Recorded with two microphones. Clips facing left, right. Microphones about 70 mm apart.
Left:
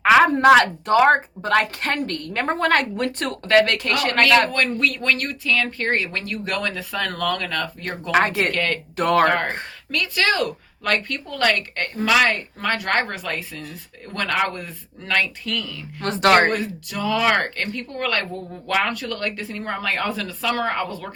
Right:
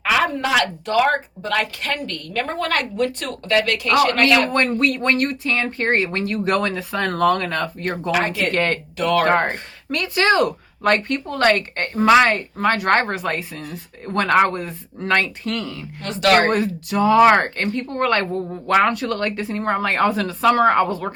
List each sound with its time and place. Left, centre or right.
0.0 s a sound: left
0.4 s speech: left
4.5 s speech: right
8.1 s speech: left
8.5 s speech: right
9.0 s speech: left
9.2 s speech: right
16.0 s speech: left
16.5 s speech: right